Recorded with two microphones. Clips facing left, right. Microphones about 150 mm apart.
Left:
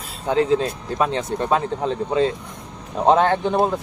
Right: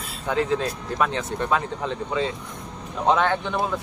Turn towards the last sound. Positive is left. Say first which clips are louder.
# left 6 dB
turn(degrees=35)  # may be behind; listen again after turning